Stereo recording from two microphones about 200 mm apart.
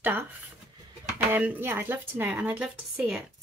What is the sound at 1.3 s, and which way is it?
A woman's voice, 10° right (ahead or behind).